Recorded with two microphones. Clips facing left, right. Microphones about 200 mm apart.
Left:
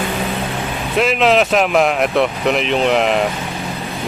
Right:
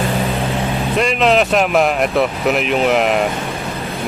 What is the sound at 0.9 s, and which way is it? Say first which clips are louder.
Speech: left 1 dB; centre (ahead or behind).